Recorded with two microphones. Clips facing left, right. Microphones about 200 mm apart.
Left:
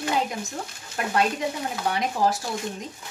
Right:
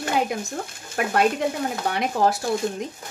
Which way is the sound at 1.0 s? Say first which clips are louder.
Right 3 dB; 60° right (ahead or behind).